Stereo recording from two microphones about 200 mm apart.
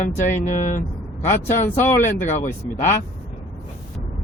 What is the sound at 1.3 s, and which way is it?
Speech, 40° left (ahead or behind).